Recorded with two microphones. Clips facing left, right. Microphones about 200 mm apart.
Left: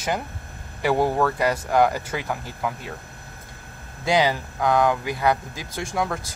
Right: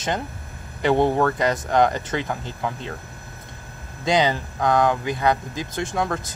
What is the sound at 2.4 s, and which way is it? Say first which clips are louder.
Speech: right 1 dB; 25° right (ahead or behind).